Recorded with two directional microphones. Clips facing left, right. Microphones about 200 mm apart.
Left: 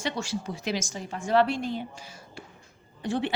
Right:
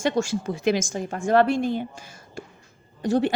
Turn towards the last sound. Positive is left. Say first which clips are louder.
# right 7 dB
turn(degrees=-40)  # may be behind; listen again after turning